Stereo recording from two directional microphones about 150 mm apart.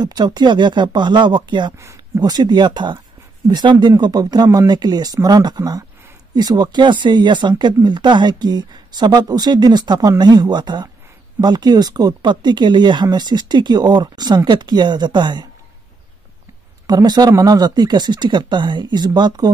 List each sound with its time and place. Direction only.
0.0 s speech: 30° right (ahead or behind)
16.8 s speech: 25° right (ahead or behind)